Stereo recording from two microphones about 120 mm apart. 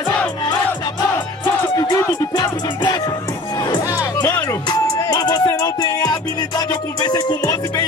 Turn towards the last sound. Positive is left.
turn(degrees=35)  # may be behind; listen again after turning